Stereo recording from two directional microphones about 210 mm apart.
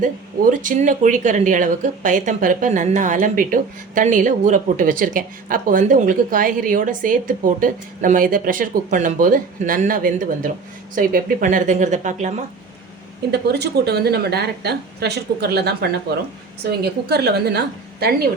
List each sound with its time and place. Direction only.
0.0 s speech: 40° right (ahead or behind)
13.3 s a woman's voice: 50° right (ahead or behind)